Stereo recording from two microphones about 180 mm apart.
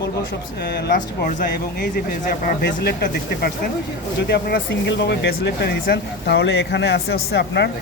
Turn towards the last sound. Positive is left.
turn(degrees=70)  # may be behind; listen again after turning